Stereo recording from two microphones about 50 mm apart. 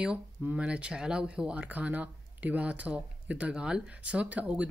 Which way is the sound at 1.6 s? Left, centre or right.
Right.